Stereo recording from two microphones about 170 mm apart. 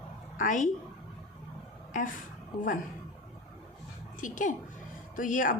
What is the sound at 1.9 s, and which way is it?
Speech, 50° left (ahead or behind).